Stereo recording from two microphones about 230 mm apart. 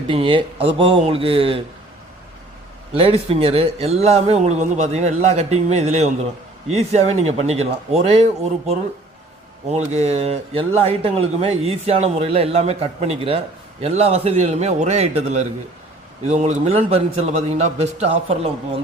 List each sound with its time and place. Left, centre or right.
0.1 s a man's voice: right
3.0 s a man's voice: right